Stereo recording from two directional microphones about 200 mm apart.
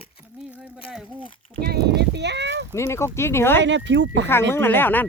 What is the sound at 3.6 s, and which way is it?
Speech, 65° right (ahead or behind).